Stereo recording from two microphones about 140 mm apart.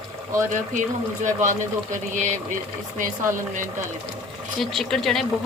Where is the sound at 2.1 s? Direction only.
60° right (ahead or behind).